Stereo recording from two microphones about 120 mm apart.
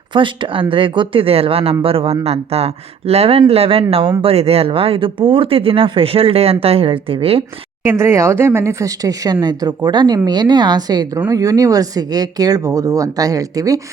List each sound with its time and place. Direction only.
0.1 s speech: 45° right (ahead or behind)
7.9 s speech: 20° right (ahead or behind)